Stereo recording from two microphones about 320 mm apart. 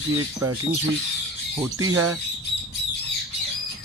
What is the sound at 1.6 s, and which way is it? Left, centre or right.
Speech, centre.